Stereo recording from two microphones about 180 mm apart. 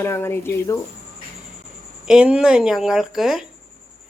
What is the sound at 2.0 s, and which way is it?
Speech, 5° right (ahead or behind).